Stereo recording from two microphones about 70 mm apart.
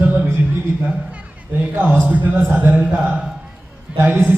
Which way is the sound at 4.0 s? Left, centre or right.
Right.